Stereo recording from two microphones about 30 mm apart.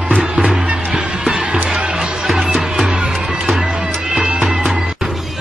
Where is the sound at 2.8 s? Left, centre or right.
Right.